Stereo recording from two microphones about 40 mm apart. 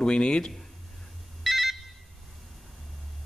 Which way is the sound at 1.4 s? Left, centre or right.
Centre.